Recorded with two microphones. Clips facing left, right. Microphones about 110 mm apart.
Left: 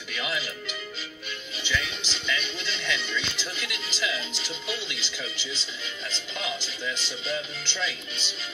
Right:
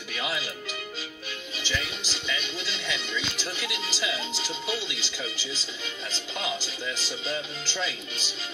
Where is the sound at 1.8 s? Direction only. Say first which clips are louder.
Even; 5° right (ahead or behind).